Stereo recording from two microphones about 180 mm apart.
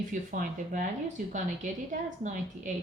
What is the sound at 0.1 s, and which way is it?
A woman's voice, 45° right (ahead or behind).